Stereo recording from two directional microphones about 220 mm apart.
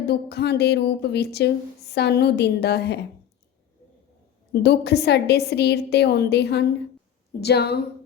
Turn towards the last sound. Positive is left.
turn(degrees=50)  # may be behind; listen again after turning